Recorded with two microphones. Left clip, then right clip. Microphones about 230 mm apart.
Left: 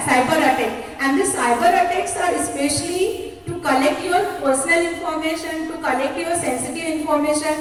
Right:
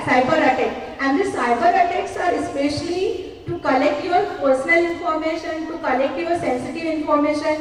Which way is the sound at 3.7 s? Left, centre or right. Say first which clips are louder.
Even; left.